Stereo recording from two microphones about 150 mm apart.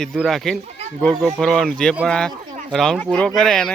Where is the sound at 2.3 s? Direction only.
30° right (ahead or behind).